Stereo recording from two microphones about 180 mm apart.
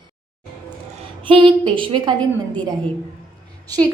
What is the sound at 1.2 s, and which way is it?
A woman's voice, 30° right (ahead or behind).